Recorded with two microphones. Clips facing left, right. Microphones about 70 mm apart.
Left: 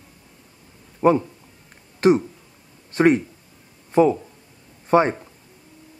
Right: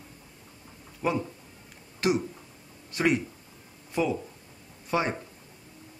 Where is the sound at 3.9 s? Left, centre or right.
Left.